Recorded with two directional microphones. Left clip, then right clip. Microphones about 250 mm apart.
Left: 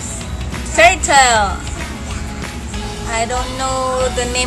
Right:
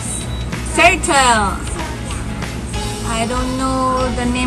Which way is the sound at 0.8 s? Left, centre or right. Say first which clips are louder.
Left 2 dB; centre.